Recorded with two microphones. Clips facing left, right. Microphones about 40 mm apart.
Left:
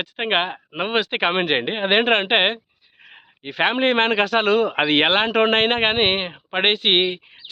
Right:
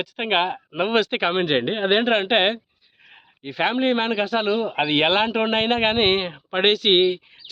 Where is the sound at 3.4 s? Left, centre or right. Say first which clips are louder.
Left 2 dB; left.